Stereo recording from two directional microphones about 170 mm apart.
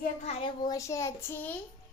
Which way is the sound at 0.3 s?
35° left (ahead or behind).